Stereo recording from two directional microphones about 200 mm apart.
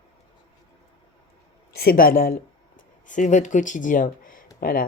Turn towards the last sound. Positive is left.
turn(degrees=45)  # may be behind; listen again after turning